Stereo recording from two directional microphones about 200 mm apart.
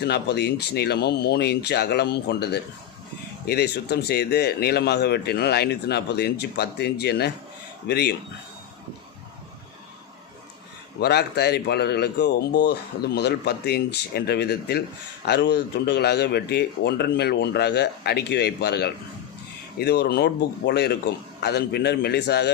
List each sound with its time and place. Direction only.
0.0 s speech: 55° left (ahead or behind)
11.0 s speech: 55° left (ahead or behind)